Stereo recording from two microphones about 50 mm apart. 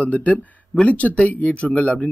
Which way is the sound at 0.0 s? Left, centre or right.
Left.